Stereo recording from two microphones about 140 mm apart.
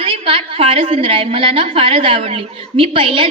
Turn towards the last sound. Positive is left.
turn(degrees=-40)  # may be behind; listen again after turning